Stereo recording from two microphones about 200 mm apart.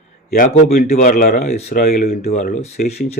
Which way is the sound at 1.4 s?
35° left (ahead or behind).